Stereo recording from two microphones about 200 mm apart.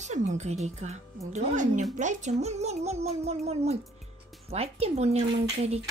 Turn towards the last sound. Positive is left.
turn(degrees=-30)  # may be behind; listen again after turning